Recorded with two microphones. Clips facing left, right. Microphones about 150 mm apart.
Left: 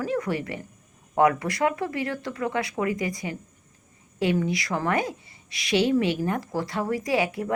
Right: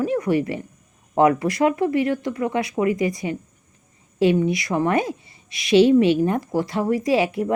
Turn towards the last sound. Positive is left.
turn(degrees=-25)  # may be behind; listen again after turning